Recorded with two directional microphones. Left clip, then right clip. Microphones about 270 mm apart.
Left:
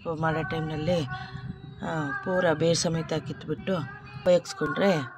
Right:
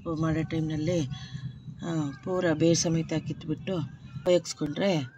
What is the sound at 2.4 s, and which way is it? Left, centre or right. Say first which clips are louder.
Speech: right 1 dB; centre.